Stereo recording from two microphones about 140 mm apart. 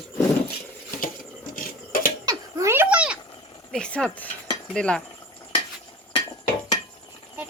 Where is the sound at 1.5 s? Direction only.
80° left.